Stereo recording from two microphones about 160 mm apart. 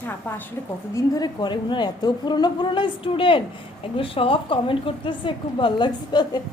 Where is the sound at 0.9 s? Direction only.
25° left (ahead or behind).